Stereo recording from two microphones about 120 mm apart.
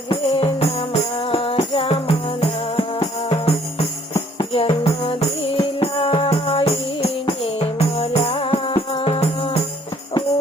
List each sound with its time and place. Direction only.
0.1 s music: 55° left (ahead or behind)